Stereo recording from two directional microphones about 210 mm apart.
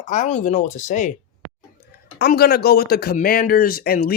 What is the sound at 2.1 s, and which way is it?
Speech, 50° left (ahead or behind).